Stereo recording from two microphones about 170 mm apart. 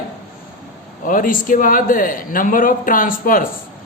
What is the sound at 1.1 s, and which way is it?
Speech, 55° left (ahead or behind).